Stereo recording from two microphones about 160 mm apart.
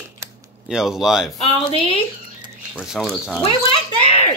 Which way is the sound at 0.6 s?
5° right (ahead or behind).